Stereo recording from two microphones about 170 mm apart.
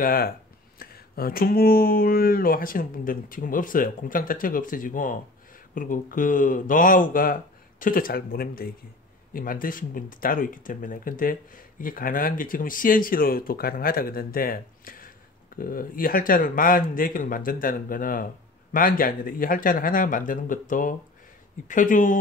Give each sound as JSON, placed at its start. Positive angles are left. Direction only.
{"t": 0.0, "sound": "speech", "side_deg": 60}